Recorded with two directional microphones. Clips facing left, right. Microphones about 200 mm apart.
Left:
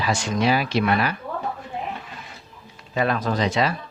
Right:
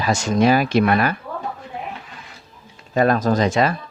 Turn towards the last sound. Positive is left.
turn(degrees=-50)  # may be behind; listen again after turning